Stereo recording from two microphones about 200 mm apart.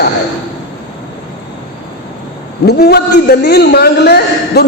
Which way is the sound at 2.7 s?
55° left (ahead or behind).